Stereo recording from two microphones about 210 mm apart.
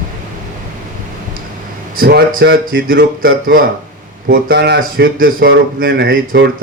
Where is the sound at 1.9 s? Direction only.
45° right (ahead or behind).